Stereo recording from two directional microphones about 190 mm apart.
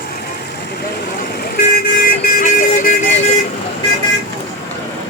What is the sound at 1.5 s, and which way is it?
Vehicle, 50° left (ahead or behind).